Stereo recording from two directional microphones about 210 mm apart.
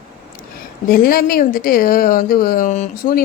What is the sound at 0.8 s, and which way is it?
A woman's voice, 45° left (ahead or behind).